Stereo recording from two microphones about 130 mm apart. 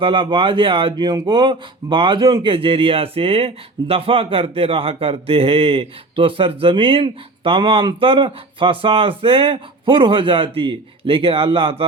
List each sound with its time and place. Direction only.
0.0 s speech: 35° right (ahead or behind)